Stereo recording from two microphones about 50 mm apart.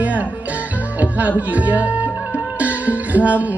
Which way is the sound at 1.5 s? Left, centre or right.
Right.